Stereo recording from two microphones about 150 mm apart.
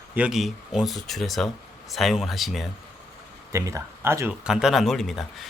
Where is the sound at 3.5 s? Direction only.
20° right (ahead or behind).